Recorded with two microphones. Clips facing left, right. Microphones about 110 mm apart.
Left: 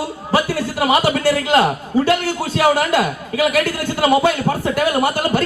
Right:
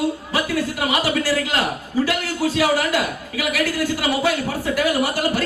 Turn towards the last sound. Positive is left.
turn(degrees=25)  # may be behind; listen again after turning